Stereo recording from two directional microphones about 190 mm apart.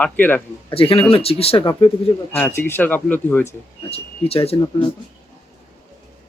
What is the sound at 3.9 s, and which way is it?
Speech, 30° left (ahead or behind).